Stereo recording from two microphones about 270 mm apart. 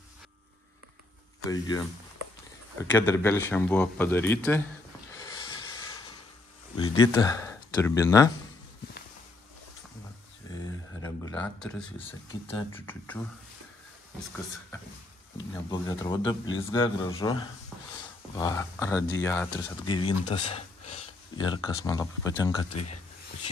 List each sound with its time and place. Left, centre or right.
1.5 s speech: centre
2.9 s speech: centre
5.1 s a sound: centre
6.8 s speech: centre
10.5 s a sound: centre
12.1 s speech: centre
15.3 s speech: centre
18.4 s speech: centre